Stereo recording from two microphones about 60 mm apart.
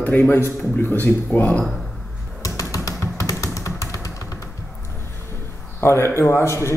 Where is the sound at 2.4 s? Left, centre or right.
Left.